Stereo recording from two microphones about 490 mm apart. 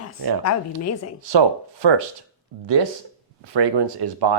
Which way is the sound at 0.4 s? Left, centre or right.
Left.